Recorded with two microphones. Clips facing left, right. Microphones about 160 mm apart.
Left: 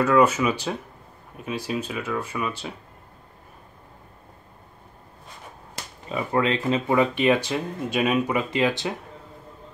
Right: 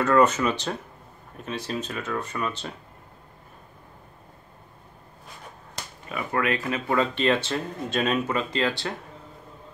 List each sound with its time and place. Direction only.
0.0 s speech: 10° left (ahead or behind)
6.0 s speech: 25° left (ahead or behind)
6.9 s speech: 15° left (ahead or behind)